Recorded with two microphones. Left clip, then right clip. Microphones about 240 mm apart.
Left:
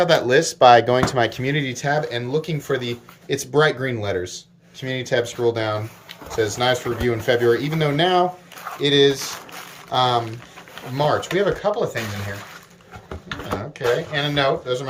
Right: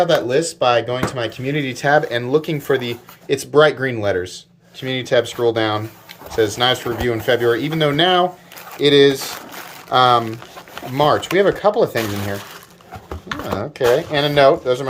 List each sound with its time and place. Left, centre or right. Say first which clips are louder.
0.0 s speech: even; centre
1.5 s speech: right 5 dB; centre; by 12.3 s right
13.2 s a sound: right 4 dB; centre
13.8 s speech: right 6 dB; right